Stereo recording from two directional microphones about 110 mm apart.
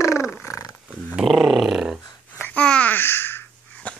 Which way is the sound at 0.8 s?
10° right (ahead or behind).